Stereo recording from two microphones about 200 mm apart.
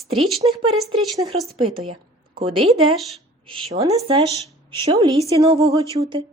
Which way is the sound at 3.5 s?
25° right (ahead or behind).